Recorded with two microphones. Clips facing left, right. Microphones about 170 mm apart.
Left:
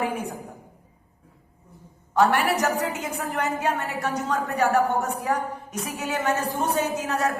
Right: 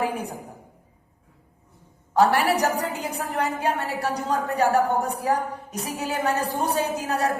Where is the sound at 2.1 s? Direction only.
35° right (ahead or behind).